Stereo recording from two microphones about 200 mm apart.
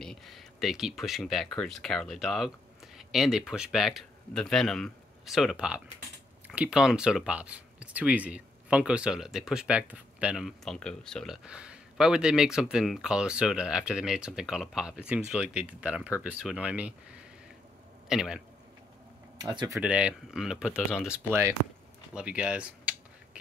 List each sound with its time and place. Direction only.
0.0 s speech: centre (ahead or behind)
18.0 s a man's voice: 5° right (ahead or behind)
19.4 s speech: 20° right (ahead or behind)
19.8 s speech: 5° right (ahead or behind)